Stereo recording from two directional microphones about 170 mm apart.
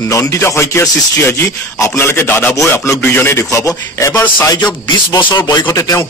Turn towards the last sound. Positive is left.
turn(degrees=20)  # may be behind; listen again after turning